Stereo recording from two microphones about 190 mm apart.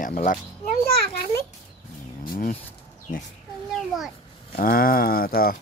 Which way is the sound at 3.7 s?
Centre (ahead or behind).